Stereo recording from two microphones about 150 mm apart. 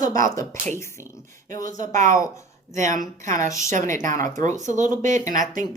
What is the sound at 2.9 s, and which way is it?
A woman's voice, 60° right (ahead or behind).